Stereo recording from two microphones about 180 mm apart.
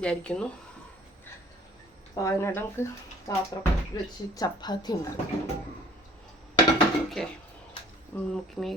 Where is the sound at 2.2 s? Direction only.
15° left (ahead or behind).